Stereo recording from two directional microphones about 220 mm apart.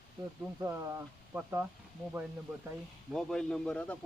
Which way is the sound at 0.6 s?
15° right (ahead or behind).